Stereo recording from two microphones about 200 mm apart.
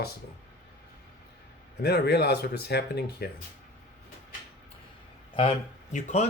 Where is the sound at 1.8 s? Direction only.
50° left (ahead or behind).